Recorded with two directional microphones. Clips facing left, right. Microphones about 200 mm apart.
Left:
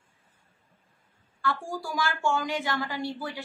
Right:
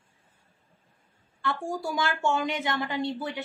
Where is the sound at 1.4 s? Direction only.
25° right (ahead or behind).